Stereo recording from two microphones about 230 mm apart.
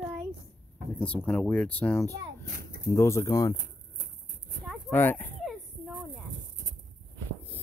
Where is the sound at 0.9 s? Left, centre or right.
Centre.